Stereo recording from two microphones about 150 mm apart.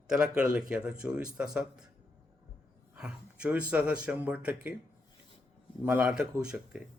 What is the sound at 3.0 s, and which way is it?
Speech, 5° right (ahead or behind).